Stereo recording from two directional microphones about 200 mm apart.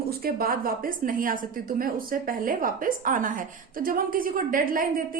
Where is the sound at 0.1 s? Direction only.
50° right (ahead or behind).